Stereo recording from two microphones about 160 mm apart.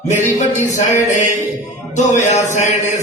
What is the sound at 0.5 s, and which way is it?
Music, 50° left (ahead or behind).